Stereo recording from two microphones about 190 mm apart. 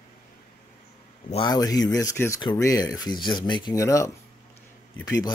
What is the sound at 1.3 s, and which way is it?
A man's voice, 20° left (ahead or behind).